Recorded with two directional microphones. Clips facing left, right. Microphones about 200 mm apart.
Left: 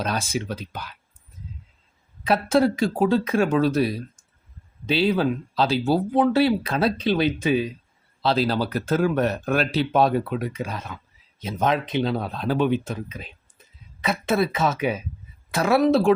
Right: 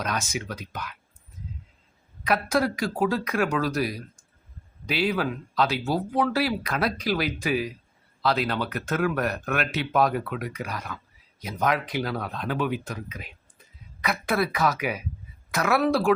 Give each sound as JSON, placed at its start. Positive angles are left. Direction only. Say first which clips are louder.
{"t": 0.0, "sound": "speech", "louder": "left 4 dB", "side_deg": 30}
{"t": 2.2, "sound": "speech", "louder": "left 5 dB", "side_deg": 25}